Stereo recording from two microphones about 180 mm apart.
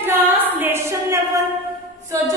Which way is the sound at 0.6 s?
15° right (ahead or behind).